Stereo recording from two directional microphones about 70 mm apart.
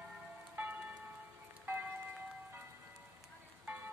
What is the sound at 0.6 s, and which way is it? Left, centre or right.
Music, right.